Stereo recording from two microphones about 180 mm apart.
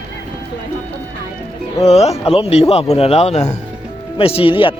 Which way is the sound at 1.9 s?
35° left (ahead or behind).